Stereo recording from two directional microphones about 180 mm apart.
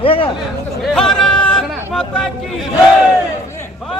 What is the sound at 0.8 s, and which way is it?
Speech, 5° left (ahead or behind).